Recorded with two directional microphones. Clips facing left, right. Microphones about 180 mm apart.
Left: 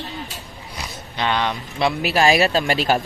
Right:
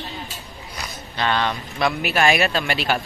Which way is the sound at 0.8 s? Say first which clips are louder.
Even; 15° left (ahead or behind).